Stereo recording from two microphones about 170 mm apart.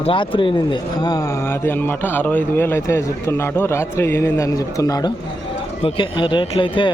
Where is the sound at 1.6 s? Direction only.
10° left (ahead or behind).